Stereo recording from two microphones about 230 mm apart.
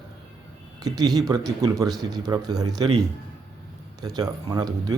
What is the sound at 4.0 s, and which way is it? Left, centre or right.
Speech, centre.